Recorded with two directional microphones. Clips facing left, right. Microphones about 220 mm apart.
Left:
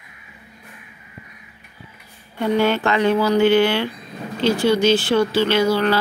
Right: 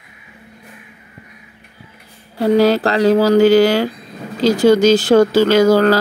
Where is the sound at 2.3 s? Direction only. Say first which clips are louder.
Right 6 dB; 35° right (ahead or behind).